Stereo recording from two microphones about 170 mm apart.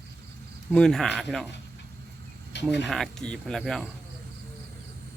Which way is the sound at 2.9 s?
Centre (ahead or behind).